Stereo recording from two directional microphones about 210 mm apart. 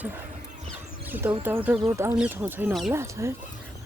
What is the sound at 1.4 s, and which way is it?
Speech, 10° right (ahead or behind).